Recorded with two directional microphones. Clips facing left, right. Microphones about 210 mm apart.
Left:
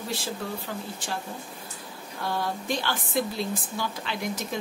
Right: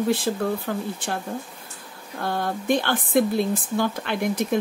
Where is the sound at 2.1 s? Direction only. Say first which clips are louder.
Right 4 dB; 50° right (ahead or behind).